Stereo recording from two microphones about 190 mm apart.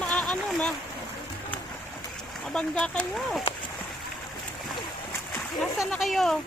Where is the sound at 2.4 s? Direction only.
5° left (ahead or behind).